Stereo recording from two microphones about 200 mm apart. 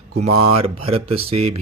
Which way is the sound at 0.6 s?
30° right (ahead or behind).